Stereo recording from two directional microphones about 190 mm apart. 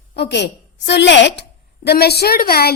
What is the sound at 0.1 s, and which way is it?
A woman's voice, 60° left (ahead or behind).